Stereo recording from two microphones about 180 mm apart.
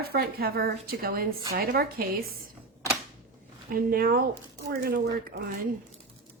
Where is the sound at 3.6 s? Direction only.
55° right (ahead or behind).